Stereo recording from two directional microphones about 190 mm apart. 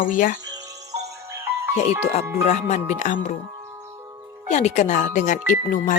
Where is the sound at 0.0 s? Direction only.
45° left (ahead or behind).